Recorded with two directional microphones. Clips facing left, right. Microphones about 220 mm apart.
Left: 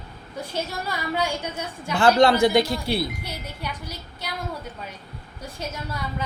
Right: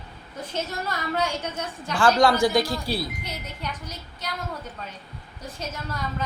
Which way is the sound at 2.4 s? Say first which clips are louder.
Left 3 dB; 25° left (ahead or behind).